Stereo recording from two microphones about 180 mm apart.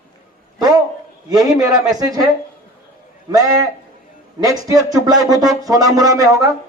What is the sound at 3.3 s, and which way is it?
Speech, 20° right (ahead or behind).